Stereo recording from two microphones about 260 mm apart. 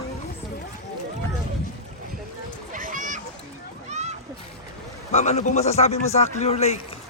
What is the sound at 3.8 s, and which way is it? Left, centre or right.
Splash, right.